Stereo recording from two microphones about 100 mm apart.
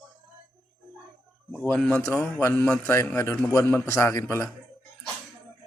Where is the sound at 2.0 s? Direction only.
35° left (ahead or behind).